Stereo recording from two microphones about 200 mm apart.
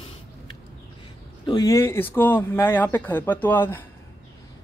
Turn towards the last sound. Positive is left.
turn(degrees=10)  # may be behind; listen again after turning